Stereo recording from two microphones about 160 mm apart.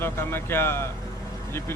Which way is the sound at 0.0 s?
15° left (ahead or behind).